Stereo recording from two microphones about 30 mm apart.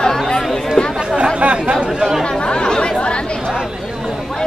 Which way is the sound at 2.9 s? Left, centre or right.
Left.